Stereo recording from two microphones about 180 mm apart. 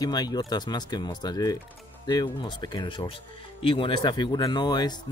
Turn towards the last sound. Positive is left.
turn(degrees=25)  # may be behind; listen again after turning